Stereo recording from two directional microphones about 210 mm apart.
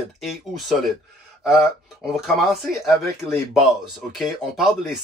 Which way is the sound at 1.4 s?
Centre (ahead or behind).